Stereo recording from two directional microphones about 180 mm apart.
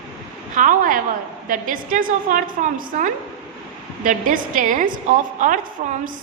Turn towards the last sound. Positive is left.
turn(degrees=-40)  # may be behind; listen again after turning